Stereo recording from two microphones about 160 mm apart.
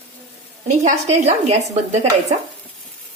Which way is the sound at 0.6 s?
50° right (ahead or behind).